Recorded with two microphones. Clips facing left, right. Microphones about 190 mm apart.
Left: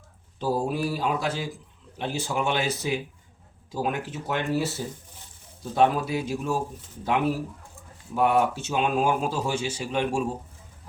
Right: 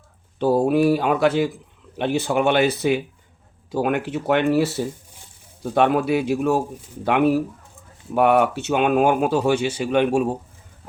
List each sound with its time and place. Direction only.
0.3 s a man's voice: 65° right (ahead or behind)
5.7 s a man's voice: 65° right (ahead or behind)